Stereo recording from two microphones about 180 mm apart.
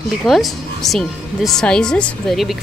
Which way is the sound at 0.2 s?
Centre (ahead or behind).